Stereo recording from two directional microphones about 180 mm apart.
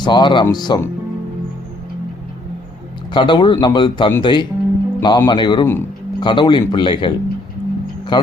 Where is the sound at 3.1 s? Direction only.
25° left (ahead or behind).